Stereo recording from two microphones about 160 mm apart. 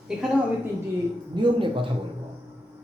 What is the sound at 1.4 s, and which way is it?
Speech, 30° right (ahead or behind).